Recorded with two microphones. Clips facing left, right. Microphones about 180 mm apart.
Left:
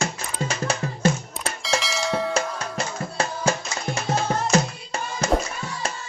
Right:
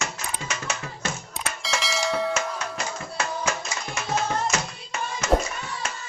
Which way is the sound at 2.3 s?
30° left (ahead or behind).